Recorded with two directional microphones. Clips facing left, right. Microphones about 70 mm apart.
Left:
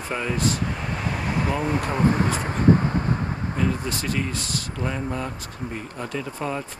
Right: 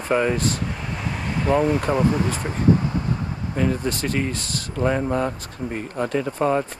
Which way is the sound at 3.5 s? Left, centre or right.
Right.